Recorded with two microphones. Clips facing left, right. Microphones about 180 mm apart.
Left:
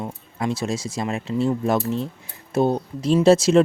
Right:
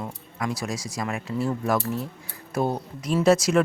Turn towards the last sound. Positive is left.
turn(degrees=25)  # may be behind; listen again after turning